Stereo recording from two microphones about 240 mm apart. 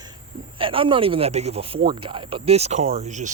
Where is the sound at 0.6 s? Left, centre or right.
Right.